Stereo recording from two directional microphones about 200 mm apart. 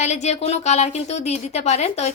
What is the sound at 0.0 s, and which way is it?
Speech, 35° left (ahead or behind).